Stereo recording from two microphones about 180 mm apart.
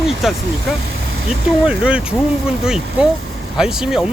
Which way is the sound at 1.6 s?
5° right (ahead or behind).